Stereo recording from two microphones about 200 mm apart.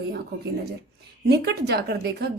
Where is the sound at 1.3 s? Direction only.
55° right (ahead or behind).